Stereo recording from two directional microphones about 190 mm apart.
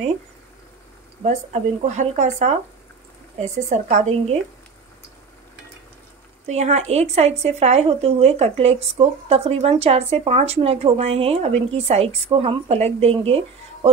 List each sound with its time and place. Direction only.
1.2 s speech: 40° right (ahead or behind)
6.4 s speech: 35° right (ahead or behind)